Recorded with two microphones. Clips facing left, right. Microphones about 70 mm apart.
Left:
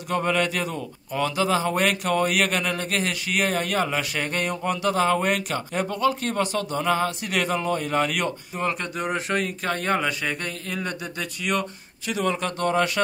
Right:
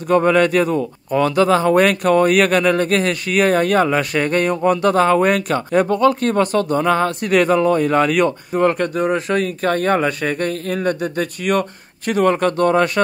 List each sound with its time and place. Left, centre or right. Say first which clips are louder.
0.1 s speech: right 10 dB; right